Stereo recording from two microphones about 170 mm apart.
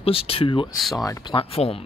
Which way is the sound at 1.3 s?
35° left (ahead or behind).